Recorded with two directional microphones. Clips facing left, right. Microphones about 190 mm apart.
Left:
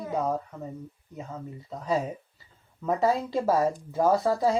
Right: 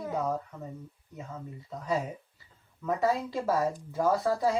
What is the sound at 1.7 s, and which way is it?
Speech, 25° left (ahead or behind).